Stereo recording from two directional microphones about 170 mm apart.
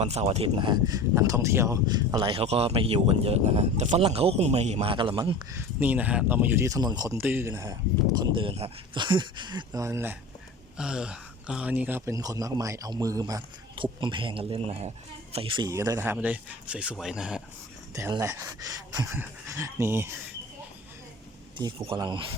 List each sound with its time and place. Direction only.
0.0 s speech: 40° right (ahead or behind); by 2.3 s 20° right (ahead or behind)
2.3 s speech: 35° right (ahead or behind); by 5.6 s 20° right (ahead or behind)
5.8 s speech: 10° right (ahead or behind)
8.2 s speech: 30° right (ahead or behind); by 17.4 s 5° right (ahead or behind)
18.1 s speech: 15° right (ahead or behind)
21.6 s speech: 25° right (ahead or behind)